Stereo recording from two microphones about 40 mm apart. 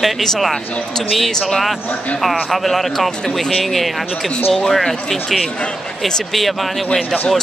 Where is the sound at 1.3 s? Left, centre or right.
Centre.